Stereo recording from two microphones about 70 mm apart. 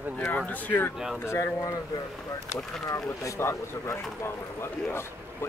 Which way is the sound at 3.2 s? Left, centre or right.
Left.